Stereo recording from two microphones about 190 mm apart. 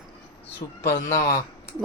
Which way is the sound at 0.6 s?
20° left (ahead or behind).